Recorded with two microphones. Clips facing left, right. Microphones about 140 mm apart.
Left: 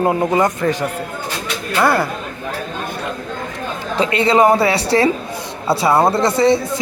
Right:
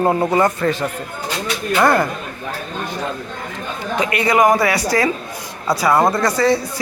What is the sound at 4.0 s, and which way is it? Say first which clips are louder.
A man's voice: left 2 dB; 25° left (ahead or behind).